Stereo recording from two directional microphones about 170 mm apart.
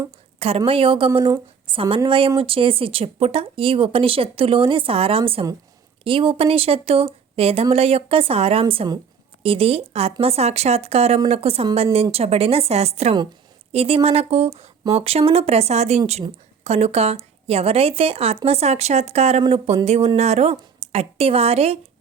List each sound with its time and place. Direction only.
0.3 s speech: 35° right (ahead or behind)